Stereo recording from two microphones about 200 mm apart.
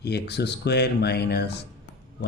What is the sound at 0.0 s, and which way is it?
Speech, 55° left (ahead or behind).